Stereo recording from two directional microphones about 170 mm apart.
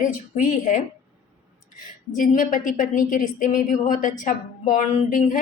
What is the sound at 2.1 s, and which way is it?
A woman's voice, 50° left (ahead or behind).